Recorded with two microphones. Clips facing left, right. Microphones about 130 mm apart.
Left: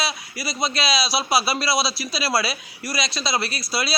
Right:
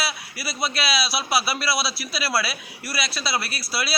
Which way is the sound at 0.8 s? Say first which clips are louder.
Left 3 dB; 25° left (ahead or behind).